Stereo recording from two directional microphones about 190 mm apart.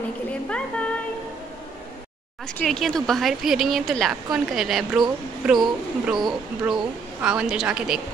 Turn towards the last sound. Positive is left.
turn(degrees=-5)  # may be behind; listen again after turning